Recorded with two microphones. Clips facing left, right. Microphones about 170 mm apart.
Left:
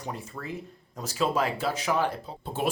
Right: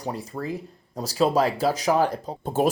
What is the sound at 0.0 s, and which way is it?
Speech, 35° right (ahead or behind).